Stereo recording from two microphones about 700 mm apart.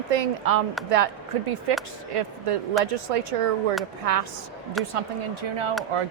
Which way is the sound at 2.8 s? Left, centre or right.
Centre.